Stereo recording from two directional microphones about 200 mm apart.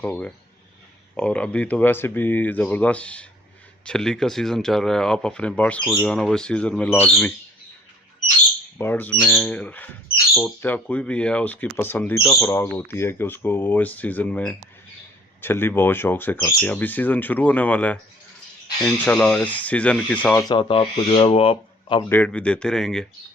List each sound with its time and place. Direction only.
0.0 s speech: 5° left (ahead or behind)
8.8 s speech: 10° left (ahead or behind)
20.5 s speech: 25° left (ahead or behind)
22.1 s speech: 5° left (ahead or behind)